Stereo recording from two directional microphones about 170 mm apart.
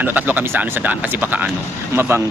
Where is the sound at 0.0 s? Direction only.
10° right (ahead or behind).